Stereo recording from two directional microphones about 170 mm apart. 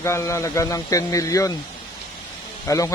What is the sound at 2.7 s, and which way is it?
Speech, 20° left (ahead or behind).